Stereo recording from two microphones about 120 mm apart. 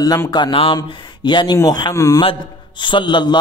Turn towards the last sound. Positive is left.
turn(degrees=40)  # may be behind; listen again after turning